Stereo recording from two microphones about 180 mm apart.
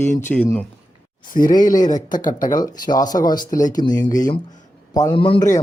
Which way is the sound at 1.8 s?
45° left (ahead or behind).